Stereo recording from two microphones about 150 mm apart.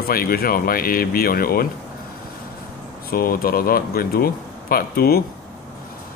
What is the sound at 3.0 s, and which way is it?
Speech, 80° left.